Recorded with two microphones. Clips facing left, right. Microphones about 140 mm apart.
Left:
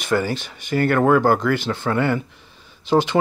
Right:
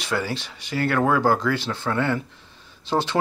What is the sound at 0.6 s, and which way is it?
Speech, 50° left (ahead or behind).